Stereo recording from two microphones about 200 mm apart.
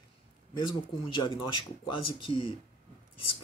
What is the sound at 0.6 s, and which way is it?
Speech, 25° left (ahead or behind).